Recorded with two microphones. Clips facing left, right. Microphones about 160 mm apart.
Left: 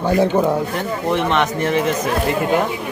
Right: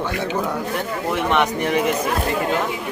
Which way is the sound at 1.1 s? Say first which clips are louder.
Left 1 dB; 10° right (ahead or behind).